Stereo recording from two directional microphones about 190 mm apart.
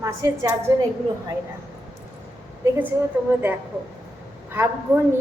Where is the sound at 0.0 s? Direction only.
15° right (ahead or behind).